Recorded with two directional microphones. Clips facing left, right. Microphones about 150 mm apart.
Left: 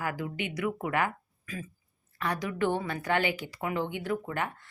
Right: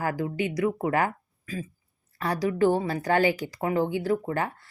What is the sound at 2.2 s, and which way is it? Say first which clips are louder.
Speech: right 6 dB; 35° right (ahead or behind).